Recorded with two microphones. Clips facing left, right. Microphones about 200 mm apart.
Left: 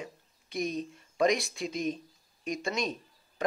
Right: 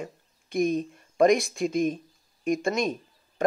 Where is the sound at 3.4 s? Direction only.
45° right (ahead or behind).